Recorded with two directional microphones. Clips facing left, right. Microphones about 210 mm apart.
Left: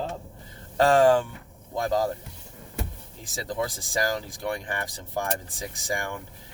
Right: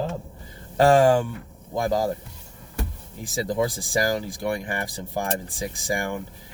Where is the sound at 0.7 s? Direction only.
15° right (ahead or behind).